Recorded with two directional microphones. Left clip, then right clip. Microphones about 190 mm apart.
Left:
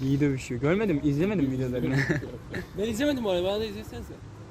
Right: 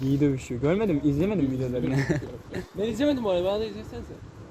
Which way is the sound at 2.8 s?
55° left (ahead or behind).